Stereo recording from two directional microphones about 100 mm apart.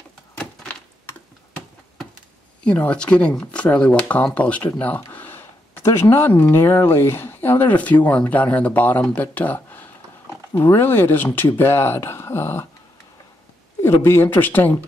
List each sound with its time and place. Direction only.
2.6 s speech: 10° left (ahead or behind)
13.8 s speech: 25° left (ahead or behind)